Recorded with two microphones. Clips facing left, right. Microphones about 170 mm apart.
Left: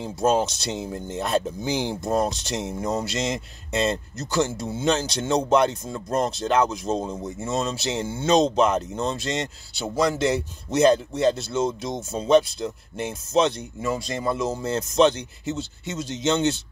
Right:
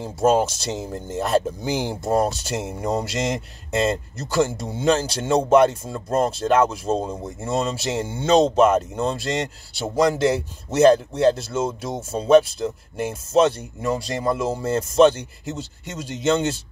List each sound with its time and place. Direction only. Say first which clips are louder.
0.0 s speech: right 3 dB; 10° right (ahead or behind)